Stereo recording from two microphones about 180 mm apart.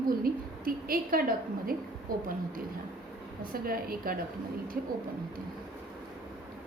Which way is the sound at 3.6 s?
55° right (ahead or behind).